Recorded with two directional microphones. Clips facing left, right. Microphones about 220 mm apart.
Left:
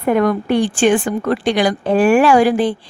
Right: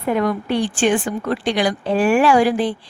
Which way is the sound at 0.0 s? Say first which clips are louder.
Left 4 dB; 50° left (ahead or behind).